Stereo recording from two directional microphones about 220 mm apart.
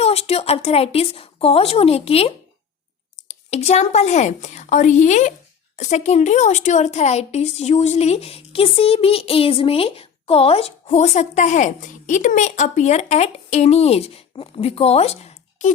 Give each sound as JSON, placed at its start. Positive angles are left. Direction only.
{"t": 0.0, "sound": "a woman's voice", "side_deg": 30}